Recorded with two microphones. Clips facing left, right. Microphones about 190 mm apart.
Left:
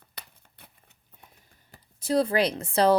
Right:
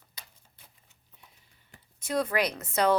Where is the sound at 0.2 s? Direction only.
65° left (ahead or behind).